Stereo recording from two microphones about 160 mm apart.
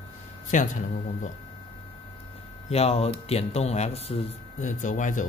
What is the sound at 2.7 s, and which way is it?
Speech, 40° left (ahead or behind).